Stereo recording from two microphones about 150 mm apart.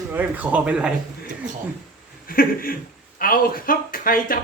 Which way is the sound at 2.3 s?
75° left (ahead or behind).